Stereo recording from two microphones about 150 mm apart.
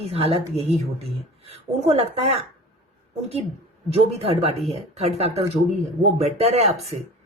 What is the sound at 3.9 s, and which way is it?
A woman's voice, 40° right (ahead or behind).